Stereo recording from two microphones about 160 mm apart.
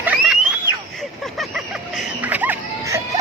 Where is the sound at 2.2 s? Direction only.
10° right (ahead or behind).